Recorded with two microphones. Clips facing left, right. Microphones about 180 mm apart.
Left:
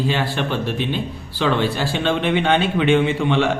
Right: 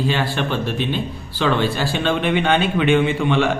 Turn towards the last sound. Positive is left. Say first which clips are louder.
# even
turn(degrees=25)  # may be behind; listen again after turning